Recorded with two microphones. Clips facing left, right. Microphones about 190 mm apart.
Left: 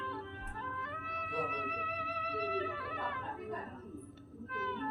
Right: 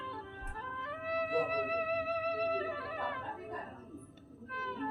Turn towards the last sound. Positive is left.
turn(degrees=-35)  # may be behind; listen again after turning